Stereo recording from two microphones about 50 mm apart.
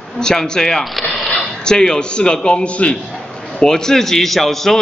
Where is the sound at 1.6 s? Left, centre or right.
Centre.